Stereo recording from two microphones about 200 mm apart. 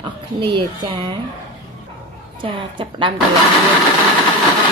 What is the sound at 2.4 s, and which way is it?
Speech, 25° right (ahead or behind).